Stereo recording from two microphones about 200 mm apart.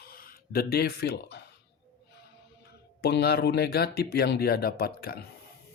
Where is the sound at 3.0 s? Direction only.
55° left (ahead or behind).